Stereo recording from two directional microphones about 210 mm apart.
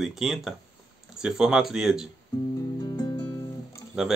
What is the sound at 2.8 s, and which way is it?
Music, 20° left (ahead or behind).